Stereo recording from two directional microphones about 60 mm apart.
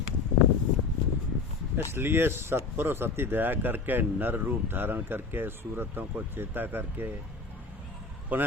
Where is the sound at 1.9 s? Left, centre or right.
Right.